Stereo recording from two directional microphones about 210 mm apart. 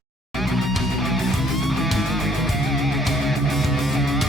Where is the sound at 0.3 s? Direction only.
Centre (ahead or behind).